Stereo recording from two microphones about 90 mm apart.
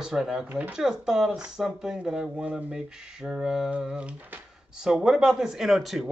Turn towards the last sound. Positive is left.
turn(degrees=0)  # may be behind; listen again after turning